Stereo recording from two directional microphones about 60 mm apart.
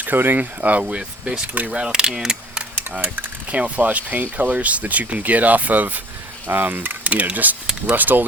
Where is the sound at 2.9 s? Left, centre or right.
Right.